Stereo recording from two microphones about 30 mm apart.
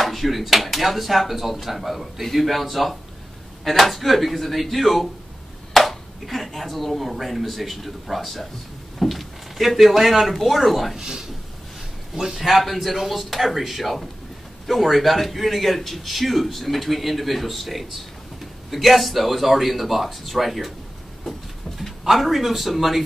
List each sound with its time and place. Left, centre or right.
0.0 s a man's voice: centre
11.0 s speech: centre
12.4 s a man's voice: centre
22.0 s a man's voice: centre